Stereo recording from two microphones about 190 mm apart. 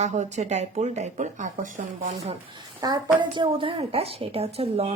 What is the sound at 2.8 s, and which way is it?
A woman's voice, 20° right (ahead or behind).